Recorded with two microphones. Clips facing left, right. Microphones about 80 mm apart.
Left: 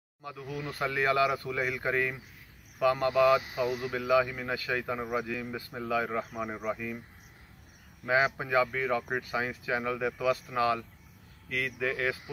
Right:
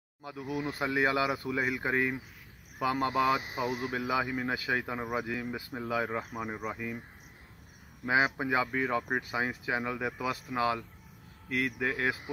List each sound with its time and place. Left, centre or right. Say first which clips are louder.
0.2 s speech: right 3 dB; centre
8.0 s speech: left 1 dB; centre